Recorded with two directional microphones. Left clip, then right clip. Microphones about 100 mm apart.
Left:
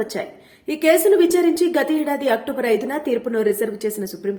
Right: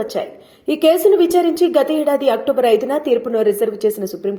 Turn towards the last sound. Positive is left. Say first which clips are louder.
# right 7 dB
turn(degrees=-15)  # may be behind; listen again after turning